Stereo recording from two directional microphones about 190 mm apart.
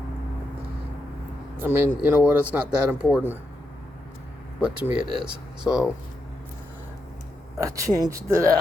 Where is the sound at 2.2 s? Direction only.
5° right (ahead or behind).